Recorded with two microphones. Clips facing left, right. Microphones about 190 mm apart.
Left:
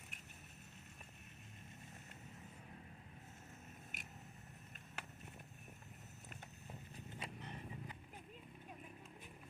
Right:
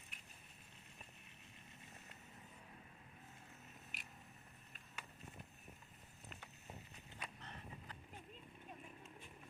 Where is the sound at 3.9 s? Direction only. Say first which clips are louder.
Left 2 dB; 45° left (ahead or behind).